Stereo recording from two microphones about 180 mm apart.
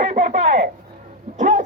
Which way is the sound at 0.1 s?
40° right (ahead or behind).